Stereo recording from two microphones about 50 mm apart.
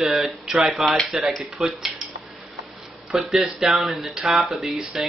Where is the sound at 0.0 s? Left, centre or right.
Centre.